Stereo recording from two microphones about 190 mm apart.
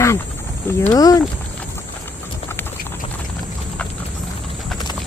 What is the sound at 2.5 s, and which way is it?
Clip-clop, 10° left (ahead or behind).